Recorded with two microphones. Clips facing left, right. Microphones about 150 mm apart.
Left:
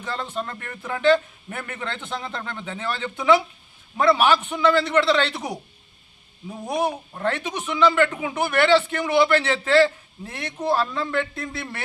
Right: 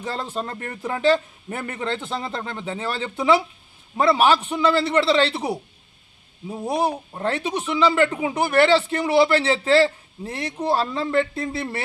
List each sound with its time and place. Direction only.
0.0 s speech: 35° right (ahead or behind)
6.7 s speech: 30° right (ahead or behind)